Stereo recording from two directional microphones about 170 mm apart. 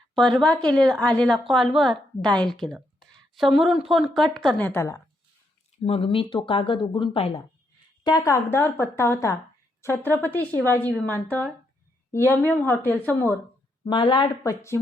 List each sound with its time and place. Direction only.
0.1 s speech: 5° left (ahead or behind)
5.8 s speech: 35° left (ahead or behind)
8.0 s speech: 20° left (ahead or behind)
13.8 s speech: 30° left (ahead or behind)